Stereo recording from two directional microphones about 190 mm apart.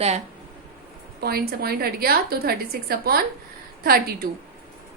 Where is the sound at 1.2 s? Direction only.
55° right (ahead or behind).